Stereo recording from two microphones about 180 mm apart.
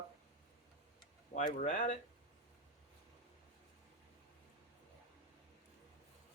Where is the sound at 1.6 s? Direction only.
45° left (ahead or behind).